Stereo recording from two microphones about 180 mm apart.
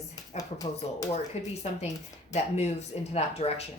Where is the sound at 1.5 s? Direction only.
40° left (ahead or behind).